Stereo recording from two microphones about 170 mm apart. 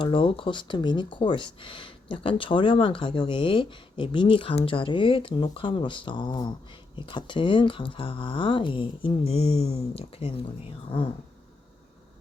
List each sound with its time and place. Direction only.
0.0 s speech: 30° left (ahead or behind)